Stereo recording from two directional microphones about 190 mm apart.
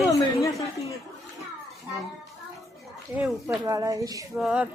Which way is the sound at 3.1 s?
10° right (ahead or behind).